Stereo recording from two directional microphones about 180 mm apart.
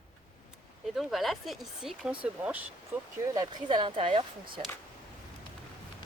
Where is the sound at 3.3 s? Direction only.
20° right (ahead or behind).